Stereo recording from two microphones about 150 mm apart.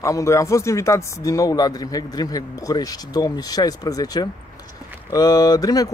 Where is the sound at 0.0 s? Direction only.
20° left (ahead or behind).